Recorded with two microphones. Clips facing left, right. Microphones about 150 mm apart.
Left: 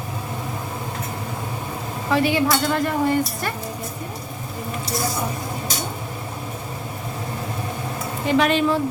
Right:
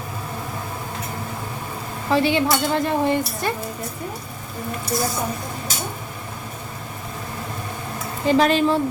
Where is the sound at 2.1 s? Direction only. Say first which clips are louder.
Right 1 dB; 30° right (ahead or behind).